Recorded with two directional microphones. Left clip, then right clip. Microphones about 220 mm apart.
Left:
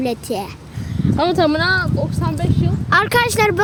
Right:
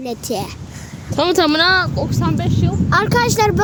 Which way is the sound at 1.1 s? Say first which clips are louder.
Right 2 dB; 50° right (ahead or behind).